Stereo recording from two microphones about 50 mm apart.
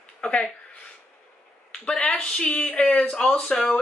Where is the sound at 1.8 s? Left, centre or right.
Left.